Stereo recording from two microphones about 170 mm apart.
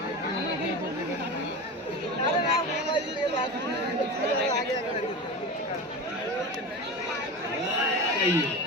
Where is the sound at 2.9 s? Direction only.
30° left (ahead or behind).